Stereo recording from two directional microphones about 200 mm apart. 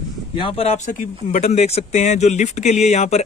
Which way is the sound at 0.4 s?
30° left (ahead or behind).